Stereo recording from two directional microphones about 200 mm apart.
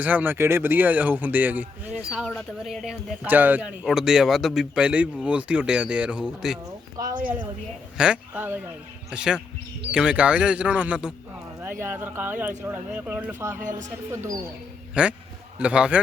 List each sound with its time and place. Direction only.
0.0 s a man's voice: 10° right (ahead or behind)
7.0 s speech: 15° right (ahead or behind)
7.9 s a man's voice: 5° right (ahead or behind)
13.6 s a woman's voice: 40° right (ahead or behind)
14.1 s a man's voice: 15° right (ahead or behind)